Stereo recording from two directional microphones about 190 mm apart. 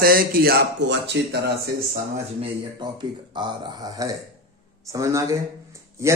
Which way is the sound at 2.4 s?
25° right (ahead or behind).